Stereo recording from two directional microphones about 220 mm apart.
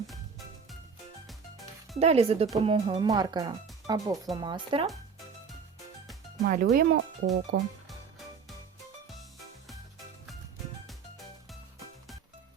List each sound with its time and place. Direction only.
2.0 s speech: 30° right (ahead or behind)
6.4 s speech: 45° right (ahead or behind)